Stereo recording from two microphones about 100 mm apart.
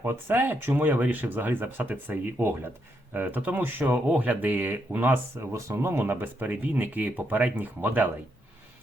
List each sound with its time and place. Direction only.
0.0 s speech: 25° right (ahead or behind)